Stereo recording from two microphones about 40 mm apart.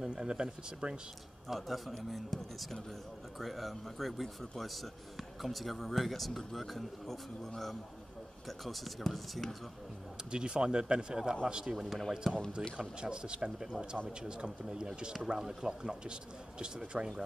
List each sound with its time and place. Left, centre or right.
0.0 s speech: centre
1.5 s speech: centre
10.3 s a man's voice: right
11.7 s speech: centre
12.7 s speech: right